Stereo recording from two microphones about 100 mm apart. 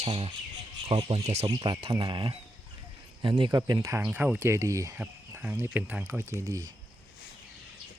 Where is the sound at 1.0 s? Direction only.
85° right.